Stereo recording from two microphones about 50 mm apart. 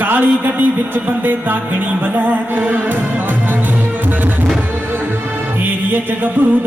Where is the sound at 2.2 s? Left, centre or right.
Right.